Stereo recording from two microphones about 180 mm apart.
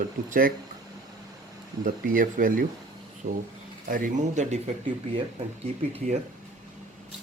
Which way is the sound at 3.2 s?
40° right (ahead or behind).